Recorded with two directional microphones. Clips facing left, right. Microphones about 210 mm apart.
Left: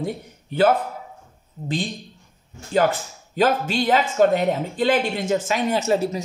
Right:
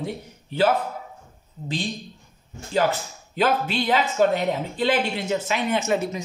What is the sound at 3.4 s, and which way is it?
Speech, 45° left (ahead or behind).